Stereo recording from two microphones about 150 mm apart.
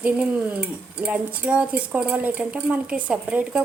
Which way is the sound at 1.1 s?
10° right (ahead or behind).